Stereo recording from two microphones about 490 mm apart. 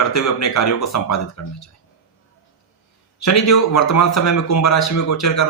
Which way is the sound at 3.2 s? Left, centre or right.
Left.